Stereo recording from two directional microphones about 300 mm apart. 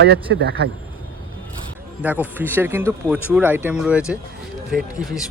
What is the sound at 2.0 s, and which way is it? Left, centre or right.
Speech, centre.